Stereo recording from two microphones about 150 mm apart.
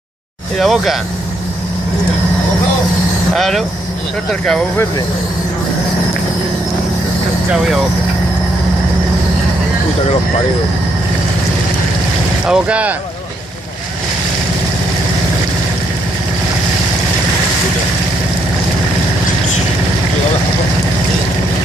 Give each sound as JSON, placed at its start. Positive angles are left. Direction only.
{"t": 0.6, "sound": "speech", "side_deg": 0}
{"t": 3.3, "sound": "speech", "side_deg": 0}
{"t": 12.4, "sound": "speech", "side_deg": -5}